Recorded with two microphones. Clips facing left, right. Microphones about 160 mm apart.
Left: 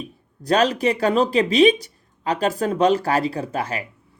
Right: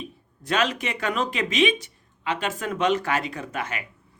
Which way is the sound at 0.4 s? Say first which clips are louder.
Left 7 dB; 35° left (ahead or behind).